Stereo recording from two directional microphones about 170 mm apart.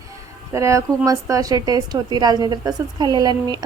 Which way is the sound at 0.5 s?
15° right (ahead or behind).